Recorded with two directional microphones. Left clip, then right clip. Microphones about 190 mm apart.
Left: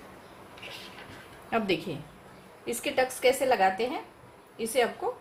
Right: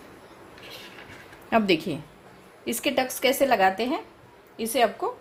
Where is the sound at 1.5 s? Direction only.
55° right (ahead or behind).